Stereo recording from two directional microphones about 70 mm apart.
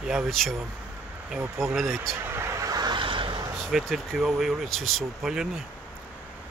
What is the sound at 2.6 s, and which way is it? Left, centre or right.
Vehicle, right.